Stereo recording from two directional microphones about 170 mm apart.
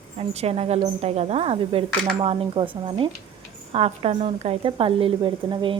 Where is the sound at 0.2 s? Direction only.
35° right (ahead or behind).